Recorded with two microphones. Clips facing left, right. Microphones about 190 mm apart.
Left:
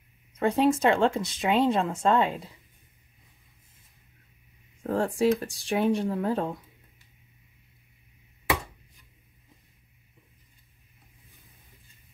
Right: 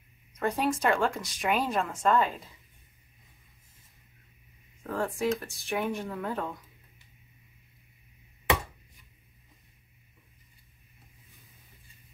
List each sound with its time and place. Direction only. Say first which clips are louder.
0.4 s speech: left 6 dB; 25° left (ahead or behind)
4.8 s speech: left 5 dB; 30° left (ahead or behind)